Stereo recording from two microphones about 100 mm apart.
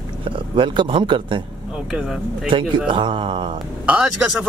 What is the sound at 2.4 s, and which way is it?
A man's voice, 55° right (ahead or behind).